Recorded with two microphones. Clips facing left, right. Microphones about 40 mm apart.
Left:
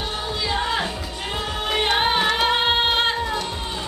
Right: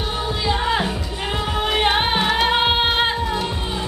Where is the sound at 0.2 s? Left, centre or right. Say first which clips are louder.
Right 3 dB; centre.